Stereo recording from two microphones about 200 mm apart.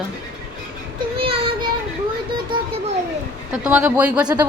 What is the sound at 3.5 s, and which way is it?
Speech, 5° right (ahead or behind).